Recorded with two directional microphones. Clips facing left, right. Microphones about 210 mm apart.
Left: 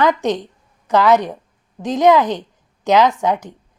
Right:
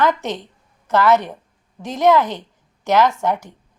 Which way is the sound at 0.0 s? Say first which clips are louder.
Left 3 dB; 15° left (ahead or behind).